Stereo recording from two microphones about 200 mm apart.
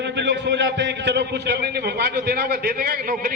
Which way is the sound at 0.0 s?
60° right (ahead or behind).